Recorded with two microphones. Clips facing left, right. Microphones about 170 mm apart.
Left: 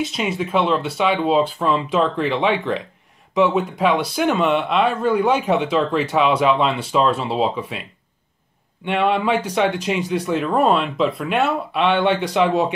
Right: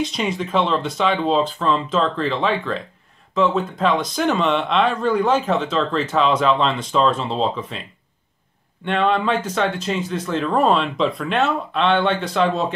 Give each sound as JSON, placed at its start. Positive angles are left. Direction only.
{"t": 0.0, "sound": "speech", "side_deg": 5}
{"t": 8.8, "sound": "speech", "side_deg": 10}